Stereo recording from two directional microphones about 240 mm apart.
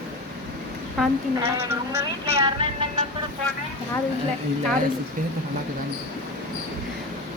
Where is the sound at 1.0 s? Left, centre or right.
Centre.